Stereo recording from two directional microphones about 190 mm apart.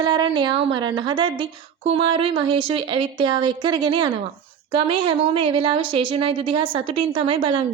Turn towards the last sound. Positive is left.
turn(degrees=-30)  # may be behind; listen again after turning